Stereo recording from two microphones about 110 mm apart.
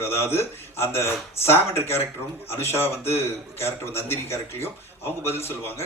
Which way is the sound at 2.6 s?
20° left (ahead or behind).